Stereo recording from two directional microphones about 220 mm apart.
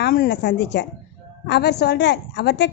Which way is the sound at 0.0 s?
50° left (ahead or behind).